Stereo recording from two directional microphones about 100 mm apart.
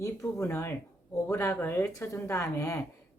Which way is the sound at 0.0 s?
30° left (ahead or behind).